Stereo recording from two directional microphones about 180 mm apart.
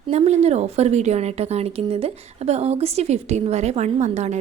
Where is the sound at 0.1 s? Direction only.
35° right (ahead or behind).